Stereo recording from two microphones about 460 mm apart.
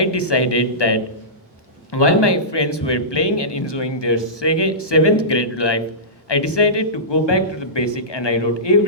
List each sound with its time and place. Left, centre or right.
0.0 s speech: left